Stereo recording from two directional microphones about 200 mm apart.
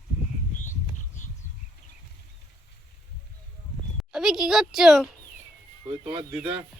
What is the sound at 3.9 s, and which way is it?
A woman's voice, centre (ahead or behind).